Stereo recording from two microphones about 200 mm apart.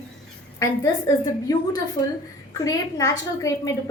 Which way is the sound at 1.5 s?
20° left (ahead or behind).